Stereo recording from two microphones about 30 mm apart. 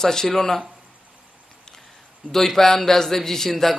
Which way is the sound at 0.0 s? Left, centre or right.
Centre.